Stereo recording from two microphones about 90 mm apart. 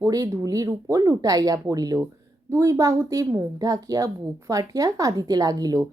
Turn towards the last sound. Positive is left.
turn(degrees=-45)  # may be behind; listen again after turning